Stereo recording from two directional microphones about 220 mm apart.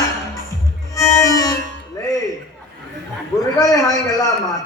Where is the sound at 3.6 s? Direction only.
15° left (ahead or behind).